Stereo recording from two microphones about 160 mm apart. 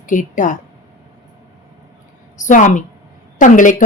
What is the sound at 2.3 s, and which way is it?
Speech, 50° left (ahead or behind).